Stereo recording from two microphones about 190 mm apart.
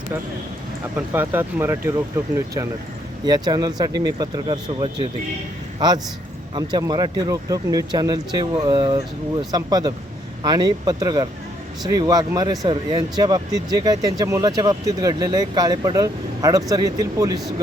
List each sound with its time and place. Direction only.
0.9 s speech: 10° right (ahead or behind)
3.2 s speech: 20° right (ahead or behind)
6.5 s speech: 20° right (ahead or behind)